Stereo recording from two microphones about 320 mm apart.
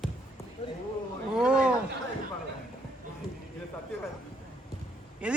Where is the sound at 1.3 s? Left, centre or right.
Centre.